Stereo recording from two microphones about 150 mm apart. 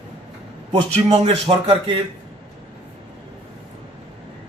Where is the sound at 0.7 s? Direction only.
40° right (ahead or behind).